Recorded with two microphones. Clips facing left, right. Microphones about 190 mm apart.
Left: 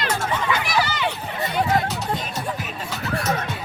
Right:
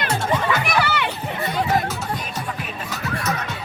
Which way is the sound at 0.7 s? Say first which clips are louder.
Right 1 dB; 60° right (ahead or behind).